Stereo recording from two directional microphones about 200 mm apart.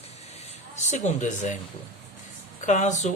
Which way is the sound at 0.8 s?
35° left (ahead or behind).